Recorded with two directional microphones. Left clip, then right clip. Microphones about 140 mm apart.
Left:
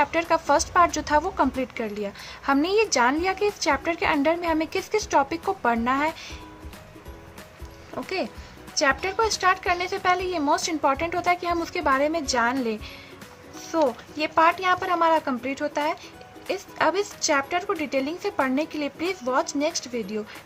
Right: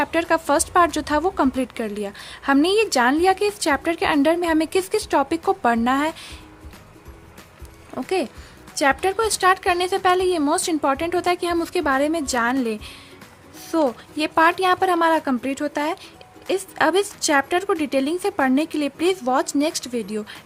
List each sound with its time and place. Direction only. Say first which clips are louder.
0.0 s speech: right 2 dB; 55° right (ahead or behind)
7.9 s a woman's voice: right 5 dB; 60° right (ahead or behind)